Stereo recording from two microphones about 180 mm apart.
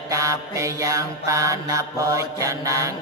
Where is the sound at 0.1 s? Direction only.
15° right (ahead or behind).